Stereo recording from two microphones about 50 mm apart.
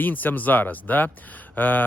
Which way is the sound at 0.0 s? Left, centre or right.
Left.